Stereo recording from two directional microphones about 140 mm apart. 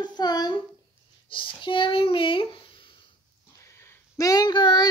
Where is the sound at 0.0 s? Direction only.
30° left (ahead or behind).